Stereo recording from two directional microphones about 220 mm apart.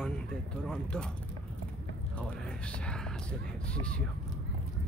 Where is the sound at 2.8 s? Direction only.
5° left (ahead or behind).